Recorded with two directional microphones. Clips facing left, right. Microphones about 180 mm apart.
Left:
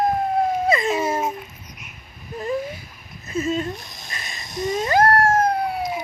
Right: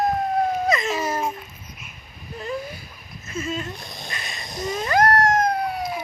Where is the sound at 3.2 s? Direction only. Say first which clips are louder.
Left 5 dB; 35° left (ahead or behind).